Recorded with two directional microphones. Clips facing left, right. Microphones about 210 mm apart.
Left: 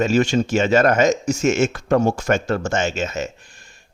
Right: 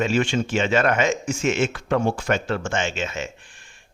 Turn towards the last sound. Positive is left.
turn(degrees=40)  # may be behind; listen again after turning